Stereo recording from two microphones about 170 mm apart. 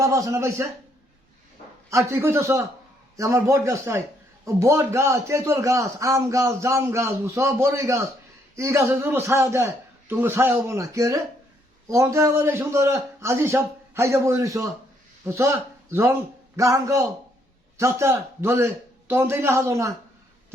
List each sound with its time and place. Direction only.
0.0 s a man's voice: 20° right (ahead or behind)
1.9 s a man's voice: 15° right (ahead or behind)